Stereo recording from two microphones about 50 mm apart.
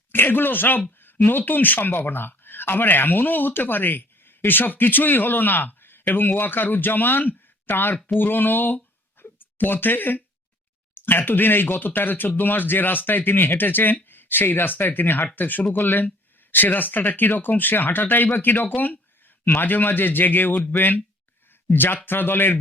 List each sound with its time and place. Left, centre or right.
0.1 s speech: left
9.2 s a sound: left
9.6 s speech: left